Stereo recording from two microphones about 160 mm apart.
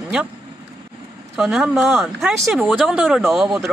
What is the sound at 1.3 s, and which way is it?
Speech, 5° right (ahead or behind).